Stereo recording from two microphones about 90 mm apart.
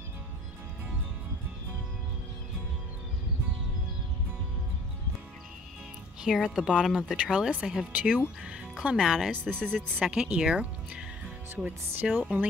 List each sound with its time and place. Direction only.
6.2 s speech: 5° right (ahead or behind)
9.3 s speech: 20° right (ahead or behind)